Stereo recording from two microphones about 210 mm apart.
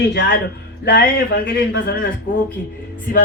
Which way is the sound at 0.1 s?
55° left (ahead or behind).